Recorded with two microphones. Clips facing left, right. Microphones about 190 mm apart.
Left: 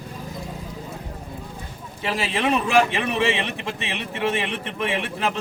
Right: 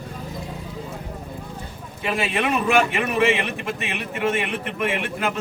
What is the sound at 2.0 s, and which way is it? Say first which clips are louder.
A man's voice: right 1 dB; 30° left (ahead or behind).